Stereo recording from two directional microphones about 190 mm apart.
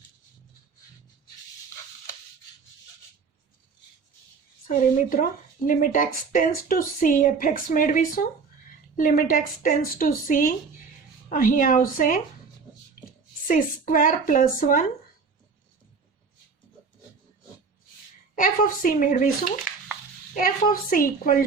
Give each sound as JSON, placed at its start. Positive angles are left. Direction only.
{"t": 4.7, "sound": "speech", "side_deg": 45}
{"t": 13.5, "sound": "speech", "side_deg": 45}
{"t": 18.3, "sound": "speech", "side_deg": 50}